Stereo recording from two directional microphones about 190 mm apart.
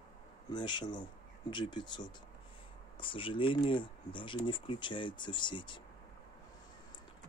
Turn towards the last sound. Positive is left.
turn(degrees=25)  # may be behind; listen again after turning